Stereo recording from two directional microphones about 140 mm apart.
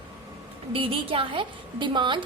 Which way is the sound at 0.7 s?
40° right (ahead or behind).